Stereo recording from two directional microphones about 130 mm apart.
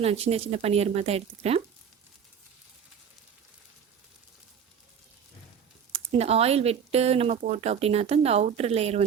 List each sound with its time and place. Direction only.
0.0 s speech: 50° right (ahead or behind)
6.1 s speech: 50° right (ahead or behind)